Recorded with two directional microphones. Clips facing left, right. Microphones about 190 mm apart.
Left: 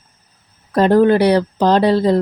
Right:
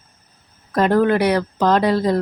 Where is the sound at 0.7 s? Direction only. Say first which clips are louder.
Left 4 dB; 30° left (ahead or behind).